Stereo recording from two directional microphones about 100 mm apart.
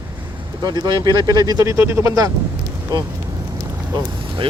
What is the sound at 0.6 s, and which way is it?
Speech, 40° right (ahead or behind).